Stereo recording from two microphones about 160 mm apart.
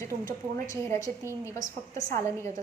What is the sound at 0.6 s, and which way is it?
A woman's voice, 20° left (ahead or behind).